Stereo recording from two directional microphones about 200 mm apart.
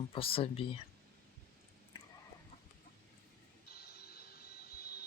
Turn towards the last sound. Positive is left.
turn(degrees=50)  # may be behind; listen again after turning